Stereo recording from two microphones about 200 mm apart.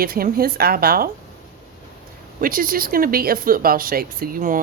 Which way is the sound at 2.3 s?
45° right (ahead or behind).